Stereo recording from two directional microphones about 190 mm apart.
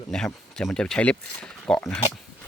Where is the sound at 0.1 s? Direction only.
5° left (ahead or behind).